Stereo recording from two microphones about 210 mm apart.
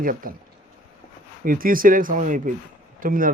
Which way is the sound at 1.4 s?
40° right (ahead or behind).